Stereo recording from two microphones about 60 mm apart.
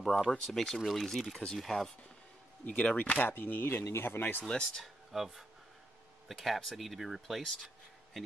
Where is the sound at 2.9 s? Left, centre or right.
Left.